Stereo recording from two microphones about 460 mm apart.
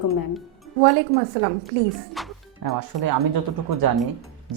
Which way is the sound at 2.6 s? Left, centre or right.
Right.